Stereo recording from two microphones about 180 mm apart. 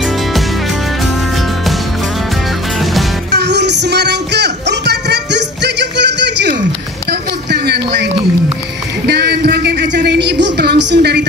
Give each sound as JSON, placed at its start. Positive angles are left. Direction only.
{"t": 2.8, "sound": "music", "side_deg": 0}
{"t": 3.3, "sound": "music", "side_deg": -70}
{"t": 7.1, "sound": "a sound", "side_deg": -65}